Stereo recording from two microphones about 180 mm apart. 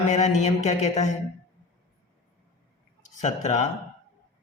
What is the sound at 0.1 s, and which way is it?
Speech, 40° left (ahead or behind).